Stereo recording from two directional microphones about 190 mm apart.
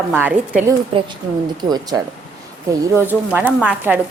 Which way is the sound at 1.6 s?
20° right (ahead or behind).